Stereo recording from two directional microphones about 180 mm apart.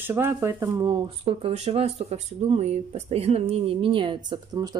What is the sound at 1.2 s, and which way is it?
Speech, 35° right (ahead or behind).